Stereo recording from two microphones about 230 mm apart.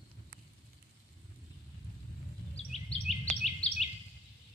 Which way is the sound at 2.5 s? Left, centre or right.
Left.